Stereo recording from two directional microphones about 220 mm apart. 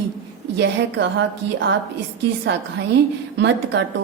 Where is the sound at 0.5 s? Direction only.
55° right (ahead or behind).